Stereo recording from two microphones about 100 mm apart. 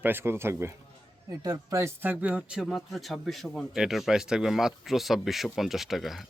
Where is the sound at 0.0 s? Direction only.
20° right (ahead or behind).